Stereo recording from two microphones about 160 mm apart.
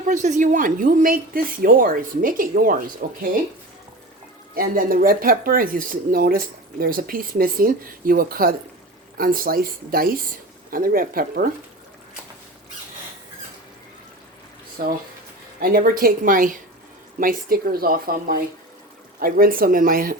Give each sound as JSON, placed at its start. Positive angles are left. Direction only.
{"t": 0.1, "sound": "speech", "side_deg": -50}
{"t": 4.5, "sound": "speech", "side_deg": -65}
{"t": 14.8, "sound": "speech", "side_deg": -65}